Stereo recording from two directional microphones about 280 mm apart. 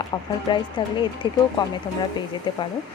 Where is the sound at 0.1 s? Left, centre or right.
Centre.